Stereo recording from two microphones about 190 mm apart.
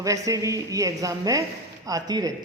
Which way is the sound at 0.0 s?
15° right (ahead or behind).